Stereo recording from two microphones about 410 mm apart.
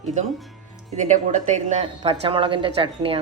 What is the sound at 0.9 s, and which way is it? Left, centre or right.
A woman's voice, centre.